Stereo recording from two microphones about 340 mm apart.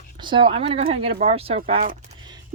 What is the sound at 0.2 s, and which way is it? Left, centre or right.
Speech, centre.